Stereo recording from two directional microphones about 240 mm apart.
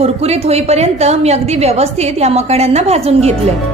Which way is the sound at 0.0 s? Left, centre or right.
Right.